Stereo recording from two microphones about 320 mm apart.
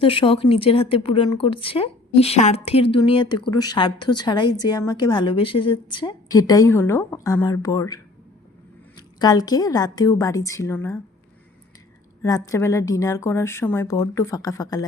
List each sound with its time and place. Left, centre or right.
0.0 s a woman's voice: centre
9.1 s a woman's voice: centre
12.2 s a woman's voice: centre